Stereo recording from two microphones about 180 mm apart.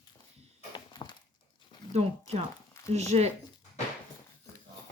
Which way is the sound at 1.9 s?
35° right (ahead or behind).